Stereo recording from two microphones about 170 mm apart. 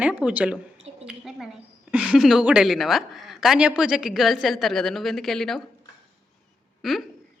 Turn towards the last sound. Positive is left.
turn(degrees=0)  # may be behind; listen again after turning